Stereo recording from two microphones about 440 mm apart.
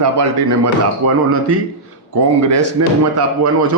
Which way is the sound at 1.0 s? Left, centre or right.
Right.